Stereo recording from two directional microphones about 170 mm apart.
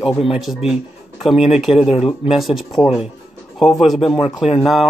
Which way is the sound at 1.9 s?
35° left (ahead or behind).